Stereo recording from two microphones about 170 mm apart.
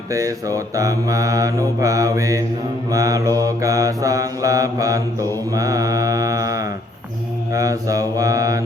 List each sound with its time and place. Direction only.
0.1 s mantra: 20° right (ahead or behind)